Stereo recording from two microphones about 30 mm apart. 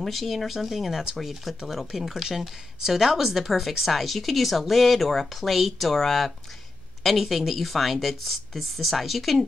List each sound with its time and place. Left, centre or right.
0.2 s speech: centre